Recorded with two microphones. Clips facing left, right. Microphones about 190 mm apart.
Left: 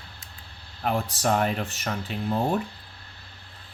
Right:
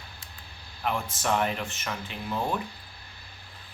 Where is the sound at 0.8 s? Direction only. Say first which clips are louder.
Left 4 dB; 40° left (ahead or behind).